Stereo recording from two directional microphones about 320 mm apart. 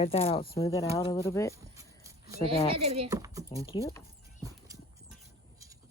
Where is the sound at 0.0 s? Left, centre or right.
Centre.